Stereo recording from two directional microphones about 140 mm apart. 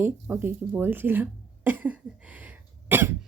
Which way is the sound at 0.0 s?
15° right (ahead or behind).